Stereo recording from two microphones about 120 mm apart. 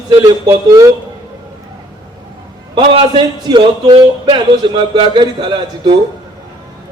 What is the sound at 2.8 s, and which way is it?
Speech, 45° right (ahead or behind).